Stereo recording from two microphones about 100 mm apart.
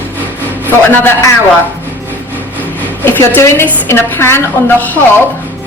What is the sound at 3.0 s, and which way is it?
A woman's voice, 20° left (ahead or behind).